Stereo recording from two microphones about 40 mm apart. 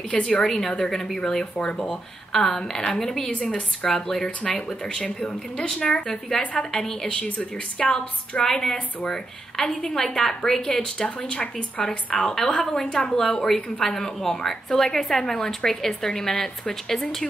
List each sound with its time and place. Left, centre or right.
0.1 s a woman's voice: left
0.5 s a woman's voice: centre
5.8 s a woman's voice: left
6.8 s a woman's voice: centre
7.3 s a woman's voice: left
9.0 s a woman's voice: centre